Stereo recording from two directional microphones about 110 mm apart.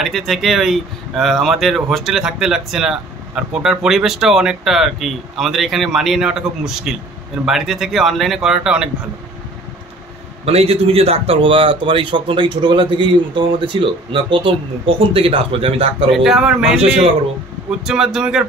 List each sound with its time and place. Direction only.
0.0 s speech: centre (ahead or behind)
10.4 s a man's voice: 65° right (ahead or behind)
16.1 s speech: 5° right (ahead or behind)
17.6 s speech: 5° right (ahead or behind)